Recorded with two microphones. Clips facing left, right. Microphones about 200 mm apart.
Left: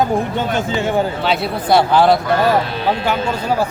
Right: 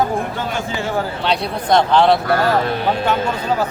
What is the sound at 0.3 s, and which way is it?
Speech, 20° left (ahead or behind).